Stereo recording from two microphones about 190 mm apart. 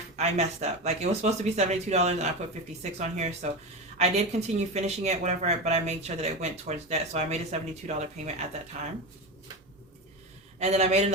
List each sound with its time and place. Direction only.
0.2 s speech: 35° right (ahead or behind)
10.6 s speech: 35° right (ahead or behind)